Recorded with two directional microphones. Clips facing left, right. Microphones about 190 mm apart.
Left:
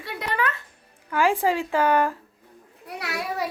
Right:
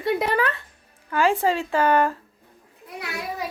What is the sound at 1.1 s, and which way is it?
Speech, 15° left (ahead or behind).